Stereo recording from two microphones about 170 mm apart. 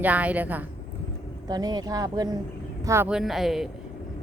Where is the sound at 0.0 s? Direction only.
10° right (ahead or behind).